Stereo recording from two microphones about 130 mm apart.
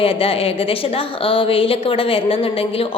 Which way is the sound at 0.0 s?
45° left (ahead or behind).